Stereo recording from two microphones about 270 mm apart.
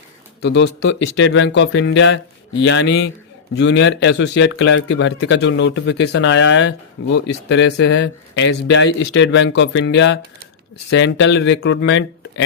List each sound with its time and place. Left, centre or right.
0.4 s a man's voice: left